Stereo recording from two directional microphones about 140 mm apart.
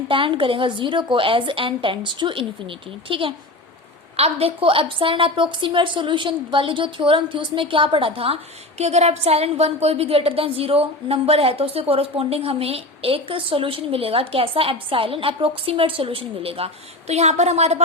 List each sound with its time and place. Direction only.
0.1 s a woman's voice: 40° right (ahead or behind)
8.8 s a woman's voice: 50° right (ahead or behind)